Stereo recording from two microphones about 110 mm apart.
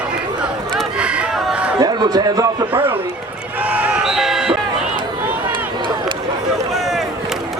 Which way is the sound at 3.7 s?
15° right (ahead or behind).